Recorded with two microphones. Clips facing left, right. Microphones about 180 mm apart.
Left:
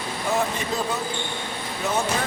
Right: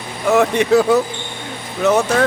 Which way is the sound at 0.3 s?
75° right (ahead or behind).